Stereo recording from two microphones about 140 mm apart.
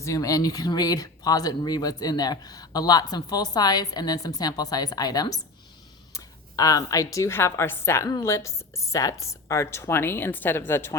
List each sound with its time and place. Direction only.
0.0 s speech: 25° left (ahead or behind)